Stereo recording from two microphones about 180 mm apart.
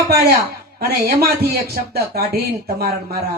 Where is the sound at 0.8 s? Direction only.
60° right (ahead or behind).